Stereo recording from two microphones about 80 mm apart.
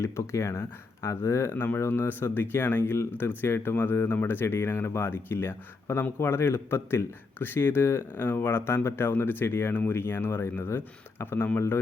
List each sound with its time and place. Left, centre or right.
0.0 s speech: left